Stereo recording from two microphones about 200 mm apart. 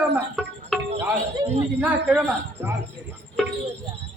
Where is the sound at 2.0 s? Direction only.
10° right (ahead or behind).